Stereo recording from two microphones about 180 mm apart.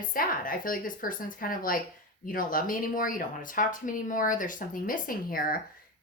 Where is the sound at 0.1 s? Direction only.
50° left (ahead or behind).